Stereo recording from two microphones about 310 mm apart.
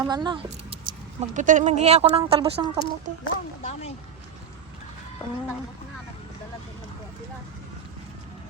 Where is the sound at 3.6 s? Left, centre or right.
Left.